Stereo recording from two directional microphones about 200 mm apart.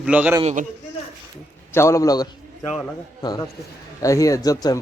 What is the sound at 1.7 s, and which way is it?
A man's voice, 15° left (ahead or behind).